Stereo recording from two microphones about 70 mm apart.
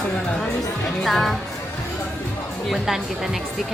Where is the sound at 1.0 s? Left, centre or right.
Centre.